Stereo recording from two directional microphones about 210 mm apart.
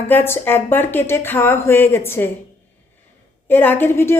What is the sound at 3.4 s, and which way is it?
Speech, 10° left (ahead or behind).